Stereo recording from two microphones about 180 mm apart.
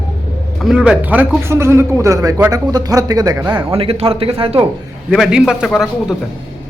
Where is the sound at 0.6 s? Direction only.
5° right (ahead or behind); by 4.6 s 30° right (ahead or behind).